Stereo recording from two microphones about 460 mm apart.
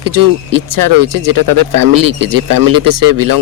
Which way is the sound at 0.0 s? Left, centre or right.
Right.